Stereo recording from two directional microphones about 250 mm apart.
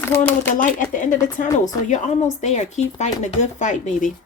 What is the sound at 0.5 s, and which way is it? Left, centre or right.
Speech, left.